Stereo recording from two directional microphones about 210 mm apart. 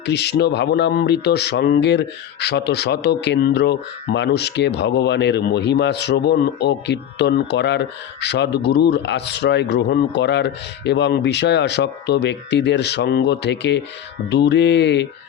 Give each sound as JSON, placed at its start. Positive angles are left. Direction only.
{"t": 0.0, "sound": "speech", "side_deg": 55}